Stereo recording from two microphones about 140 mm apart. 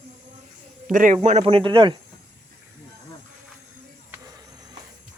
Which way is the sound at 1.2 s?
50° right (ahead or behind).